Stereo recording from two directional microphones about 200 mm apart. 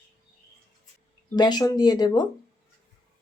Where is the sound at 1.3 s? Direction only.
20° left (ahead or behind).